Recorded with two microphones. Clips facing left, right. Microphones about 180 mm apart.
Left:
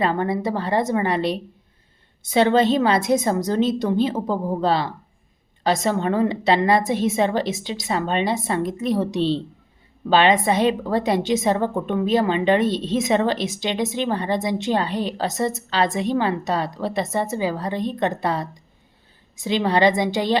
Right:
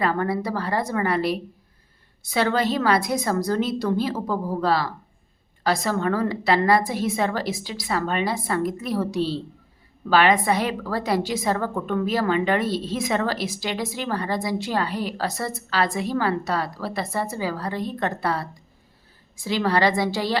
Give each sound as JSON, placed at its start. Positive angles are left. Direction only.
{"t": 0.0, "sound": "a woman's voice", "side_deg": 25}